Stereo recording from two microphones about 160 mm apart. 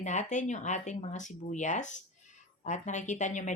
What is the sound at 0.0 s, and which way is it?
A woman's voice, 50° left (ahead or behind).